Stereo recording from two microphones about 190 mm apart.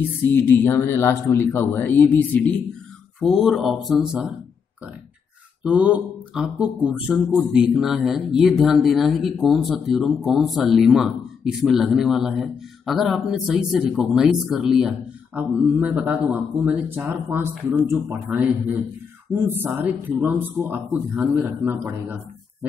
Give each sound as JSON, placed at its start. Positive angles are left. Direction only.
{"t": 0.3, "sound": "speech", "side_deg": 10}
{"t": 5.6, "sound": "a man's voice", "side_deg": -5}